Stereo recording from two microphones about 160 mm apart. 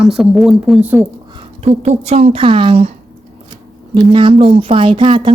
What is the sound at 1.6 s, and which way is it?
Speech, 45° right (ahead or behind).